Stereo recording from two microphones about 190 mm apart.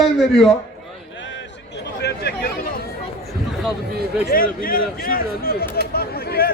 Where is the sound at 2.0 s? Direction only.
60° left (ahead or behind).